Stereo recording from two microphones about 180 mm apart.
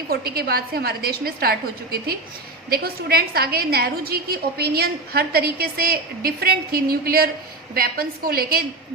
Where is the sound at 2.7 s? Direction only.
60° right (ahead or behind).